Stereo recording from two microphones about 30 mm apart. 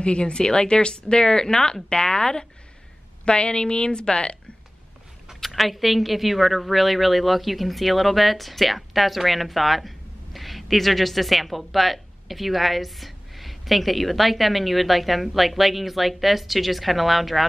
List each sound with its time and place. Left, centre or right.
0.0 s a woman's voice: left
5.5 s a woman's voice: centre